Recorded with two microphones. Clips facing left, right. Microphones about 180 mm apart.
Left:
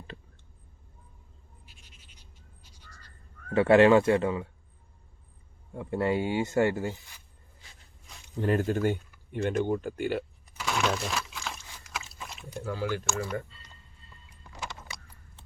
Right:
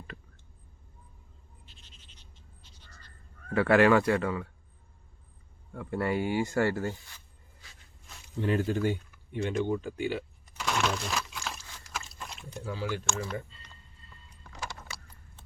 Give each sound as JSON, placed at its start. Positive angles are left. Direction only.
{"t": 1.6, "sound": "a sound", "side_deg": 10}
{"t": 3.5, "sound": "speech", "side_deg": 25}
{"t": 5.7, "sound": "speech", "side_deg": 20}
{"t": 8.4, "sound": "speech", "side_deg": 45}
{"t": 10.6, "sound": "a sound", "side_deg": 0}
{"t": 12.6, "sound": "speech", "side_deg": 55}